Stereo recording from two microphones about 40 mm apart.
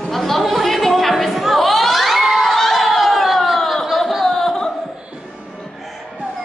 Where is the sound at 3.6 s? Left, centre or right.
Centre.